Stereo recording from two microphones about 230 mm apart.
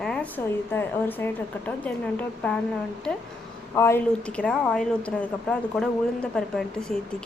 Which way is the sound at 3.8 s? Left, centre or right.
Centre.